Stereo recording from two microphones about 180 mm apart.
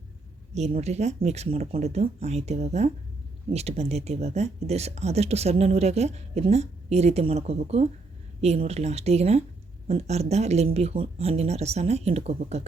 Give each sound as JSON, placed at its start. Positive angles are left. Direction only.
{"t": 0.5, "sound": "speech", "side_deg": -35}